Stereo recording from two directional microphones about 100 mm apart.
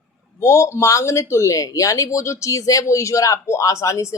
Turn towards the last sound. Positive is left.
turn(degrees=30)  # may be behind; listen again after turning